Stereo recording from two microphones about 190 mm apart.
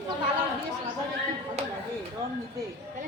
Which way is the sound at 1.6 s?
35° right (ahead or behind).